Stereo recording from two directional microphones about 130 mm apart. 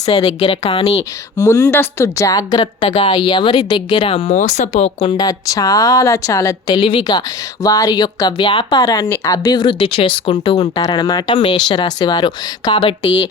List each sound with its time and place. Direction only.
0.1 s speech: 45° left (ahead or behind)
1.4 s a woman's voice: 25° left (ahead or behind)
2.6 s a woman's voice: 40° left (ahead or behind)
4.4 s speech: 70° left (ahead or behind); by 5.1 s 55° left (ahead or behind)
5.1 s a woman's voice: 30° left (ahead or behind)
7.6 s a woman's voice: 25° left (ahead or behind)
8.8 s a woman's voice: 30° left (ahead or behind)